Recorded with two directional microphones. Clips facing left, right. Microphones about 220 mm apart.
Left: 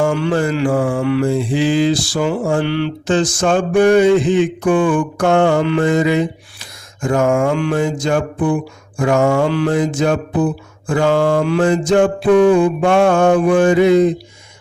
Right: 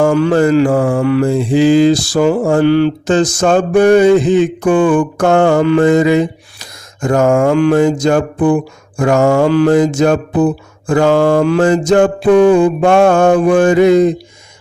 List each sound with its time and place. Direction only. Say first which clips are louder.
0.0 s mantra: right 6 dB; 40° right (ahead or behind)